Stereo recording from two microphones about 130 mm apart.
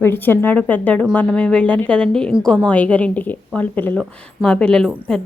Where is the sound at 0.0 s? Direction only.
15° left (ahead or behind).